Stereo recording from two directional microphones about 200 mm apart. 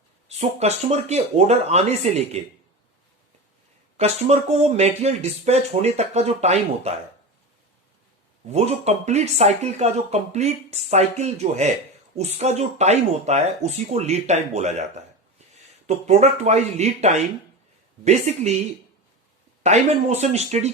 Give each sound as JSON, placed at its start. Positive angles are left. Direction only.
{"t": 0.3, "sound": "speech", "side_deg": -30}
{"t": 3.9, "sound": "speech", "side_deg": -30}
{"t": 8.4, "sound": "speech", "side_deg": -35}
{"t": 19.6, "sound": "speech", "side_deg": -35}